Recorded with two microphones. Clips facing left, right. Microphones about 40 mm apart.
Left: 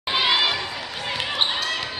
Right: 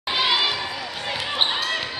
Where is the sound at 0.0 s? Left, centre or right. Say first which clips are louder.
Left 1 dB; centre.